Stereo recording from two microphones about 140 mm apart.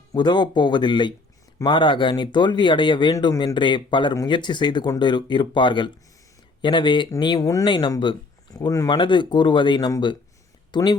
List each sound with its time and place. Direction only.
0.1 s speech: 30° left (ahead or behind)